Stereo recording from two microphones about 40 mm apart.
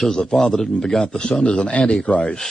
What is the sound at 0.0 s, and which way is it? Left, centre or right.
A man's voice, centre.